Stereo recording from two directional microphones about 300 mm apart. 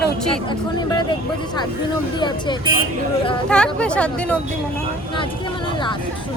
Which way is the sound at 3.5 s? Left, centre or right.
Centre.